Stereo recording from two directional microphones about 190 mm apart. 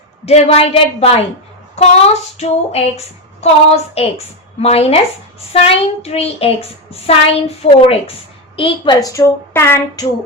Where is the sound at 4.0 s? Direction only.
35° left (ahead or behind).